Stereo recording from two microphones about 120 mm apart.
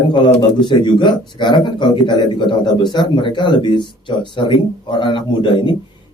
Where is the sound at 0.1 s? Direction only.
40° left (ahead or behind).